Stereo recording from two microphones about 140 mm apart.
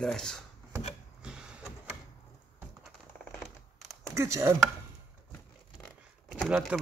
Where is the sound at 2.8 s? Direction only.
Centre (ahead or behind).